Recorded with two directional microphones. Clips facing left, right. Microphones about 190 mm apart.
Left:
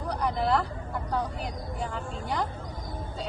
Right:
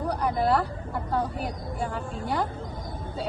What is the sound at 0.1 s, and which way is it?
A woman's voice, 5° right (ahead or behind).